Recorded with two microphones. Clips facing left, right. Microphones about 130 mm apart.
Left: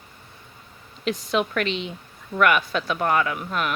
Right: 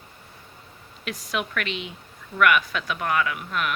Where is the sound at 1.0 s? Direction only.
25° left (ahead or behind).